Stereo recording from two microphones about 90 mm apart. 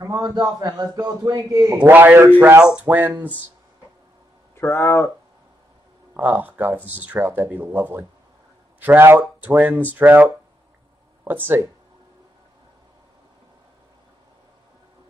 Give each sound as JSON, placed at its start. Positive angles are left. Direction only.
{"t": 0.0, "sound": "a man's voice", "side_deg": -40}
{"t": 1.8, "sound": "speech", "side_deg": -20}
{"t": 4.6, "sound": "speech", "side_deg": 30}
{"t": 6.1, "sound": "speech", "side_deg": -20}